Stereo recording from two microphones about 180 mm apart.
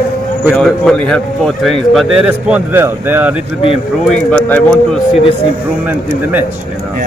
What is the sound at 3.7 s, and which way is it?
Speech, 5° left (ahead or behind).